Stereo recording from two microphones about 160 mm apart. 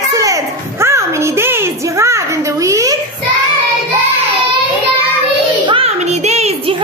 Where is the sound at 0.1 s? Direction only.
20° right (ahead or behind).